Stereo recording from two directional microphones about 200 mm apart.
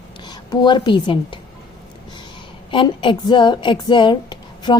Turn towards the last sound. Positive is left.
turn(degrees=20)  # may be behind; listen again after turning